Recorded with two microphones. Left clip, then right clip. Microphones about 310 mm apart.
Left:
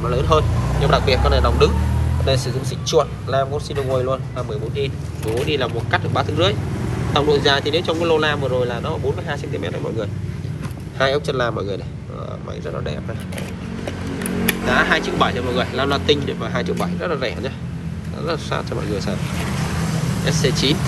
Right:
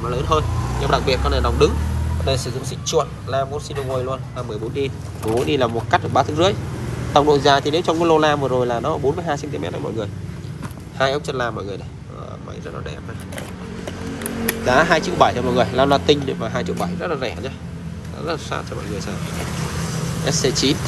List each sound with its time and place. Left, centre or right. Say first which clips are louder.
0.0 s speech: left 2 dB; centre
14.7 s speech: right 2 dB; centre
20.2 s speech: right 1 dB; centre